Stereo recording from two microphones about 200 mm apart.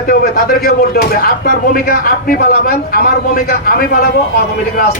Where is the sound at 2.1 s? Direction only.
45° left (ahead or behind).